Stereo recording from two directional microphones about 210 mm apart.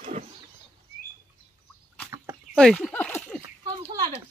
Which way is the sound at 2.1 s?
15° right (ahead or behind).